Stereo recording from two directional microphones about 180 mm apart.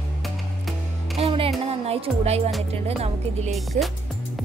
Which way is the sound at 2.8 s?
35° right (ahead or behind).